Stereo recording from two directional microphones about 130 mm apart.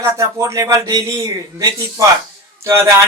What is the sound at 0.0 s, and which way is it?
A man's voice, 25° right (ahead or behind).